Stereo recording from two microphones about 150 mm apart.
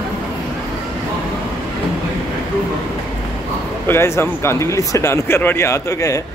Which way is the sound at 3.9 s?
15° left (ahead or behind).